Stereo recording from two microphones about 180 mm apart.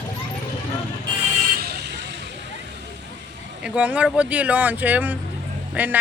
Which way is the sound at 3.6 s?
5° right (ahead or behind).